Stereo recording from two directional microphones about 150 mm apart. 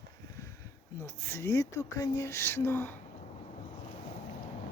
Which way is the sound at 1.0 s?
15° left (ahead or behind).